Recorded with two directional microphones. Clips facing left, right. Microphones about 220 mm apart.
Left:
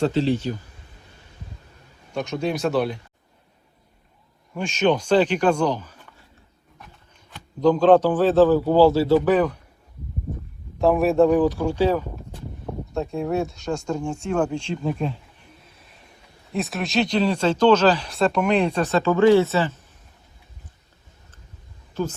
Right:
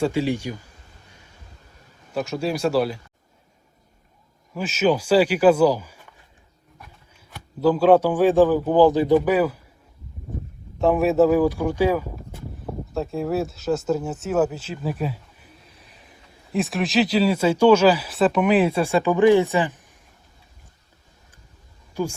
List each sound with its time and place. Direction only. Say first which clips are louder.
0.0 s speech: left 1 dB; 10° right (ahead or behind)
2.1 s speech: even; centre (ahead or behind)
4.5 s a man's voice: even; 5° right (ahead or behind)
10.8 s speech: even; centre (ahead or behind)
22.0 s speech: right 1 dB; 10° right (ahead or behind)